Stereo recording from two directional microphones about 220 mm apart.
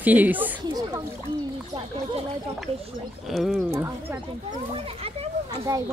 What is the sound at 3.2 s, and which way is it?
Speech, centre (ahead or behind).